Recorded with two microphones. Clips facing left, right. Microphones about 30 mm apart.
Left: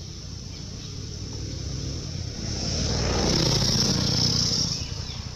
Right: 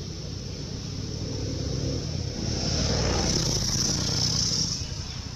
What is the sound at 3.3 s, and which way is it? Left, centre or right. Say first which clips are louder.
Vehicle: left 4 dB; left.